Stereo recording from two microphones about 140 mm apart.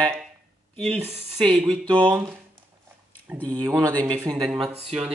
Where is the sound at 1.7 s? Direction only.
35° right (ahead or behind).